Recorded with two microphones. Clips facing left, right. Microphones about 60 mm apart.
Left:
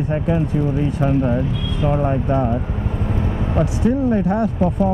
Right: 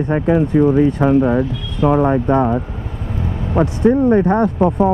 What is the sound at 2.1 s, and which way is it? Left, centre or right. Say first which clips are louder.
Speech: right 5 dB; right.